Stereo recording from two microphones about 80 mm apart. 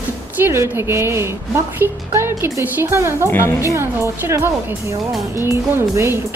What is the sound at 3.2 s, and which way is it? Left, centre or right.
Speech, left.